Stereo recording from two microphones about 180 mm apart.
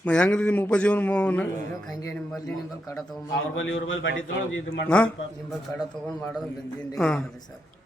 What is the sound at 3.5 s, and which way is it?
A man's voice, 90° left.